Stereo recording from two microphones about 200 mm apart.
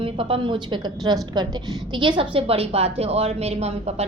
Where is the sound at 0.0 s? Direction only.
25° right (ahead or behind).